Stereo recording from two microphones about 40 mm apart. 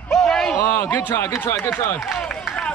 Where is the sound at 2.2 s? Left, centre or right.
Left.